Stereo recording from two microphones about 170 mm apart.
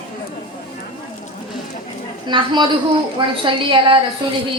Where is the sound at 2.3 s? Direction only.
25° right (ahead or behind).